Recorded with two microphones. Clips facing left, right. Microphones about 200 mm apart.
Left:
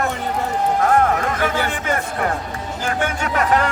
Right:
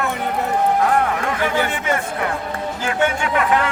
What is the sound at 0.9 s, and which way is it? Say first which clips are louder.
Speech: left 2 dB; 40° left (ahead or behind).